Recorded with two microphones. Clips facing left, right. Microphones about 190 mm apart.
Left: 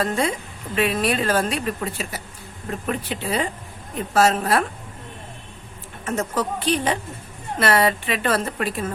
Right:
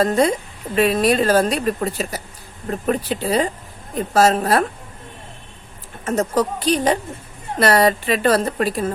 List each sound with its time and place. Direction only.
0.0 s a woman's voice: 40° right (ahead or behind)
6.1 s a woman's voice: 40° right (ahead or behind)